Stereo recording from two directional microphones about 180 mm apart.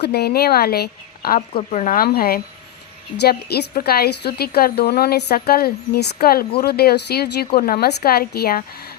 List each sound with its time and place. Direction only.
0.0 s a woman's voice: 60° left (ahead or behind)
1.4 s speech: 40° left (ahead or behind)
3.2 s a woman's voice: 65° left (ahead or behind)